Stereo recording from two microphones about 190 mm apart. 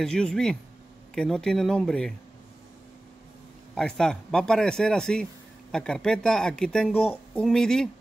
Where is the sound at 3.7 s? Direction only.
5° left (ahead or behind).